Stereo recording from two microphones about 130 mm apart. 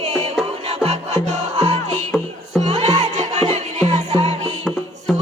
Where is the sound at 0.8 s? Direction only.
55° right (ahead or behind).